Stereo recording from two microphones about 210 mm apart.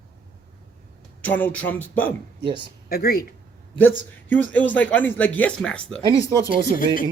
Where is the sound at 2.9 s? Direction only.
45° left (ahead or behind).